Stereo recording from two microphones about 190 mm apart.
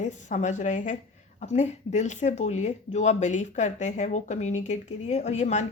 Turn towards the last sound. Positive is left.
turn(degrees=35)  # may be behind; listen again after turning